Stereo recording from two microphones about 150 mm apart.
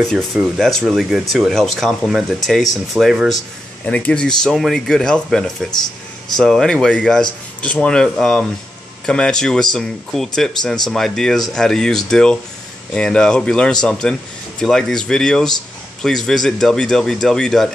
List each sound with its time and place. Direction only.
0.0 s speech: centre (ahead or behind)
3.8 s speech: 10° left (ahead or behind)